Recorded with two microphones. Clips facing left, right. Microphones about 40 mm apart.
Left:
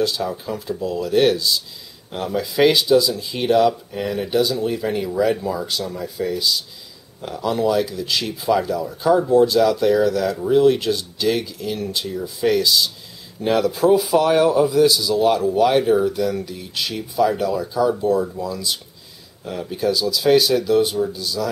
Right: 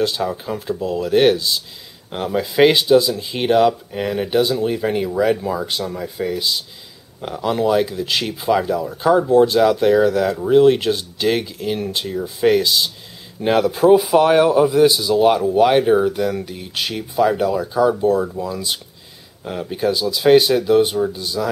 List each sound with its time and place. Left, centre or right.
0.0 s a man's voice: right